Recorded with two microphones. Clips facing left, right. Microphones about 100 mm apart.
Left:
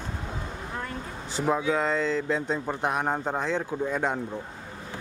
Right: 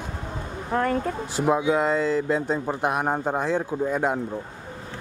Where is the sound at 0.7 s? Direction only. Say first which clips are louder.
Right 13 dB; 60° right (ahead or behind).